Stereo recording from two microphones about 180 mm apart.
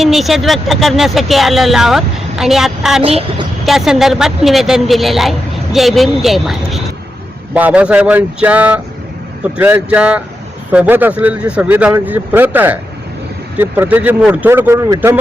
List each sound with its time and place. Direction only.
0.0 s a woman's voice: centre (ahead or behind)
3.0 s a child's voice: 35° right (ahead or behind)
3.7 s a woman's voice: centre (ahead or behind)